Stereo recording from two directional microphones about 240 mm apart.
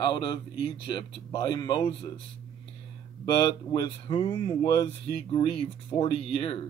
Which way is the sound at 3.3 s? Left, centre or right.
Centre.